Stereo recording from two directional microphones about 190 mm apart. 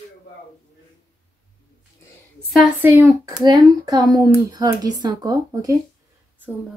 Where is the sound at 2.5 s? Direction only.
10° right (ahead or behind).